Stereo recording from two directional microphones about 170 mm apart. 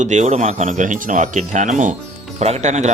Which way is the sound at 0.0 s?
45° right (ahead or behind).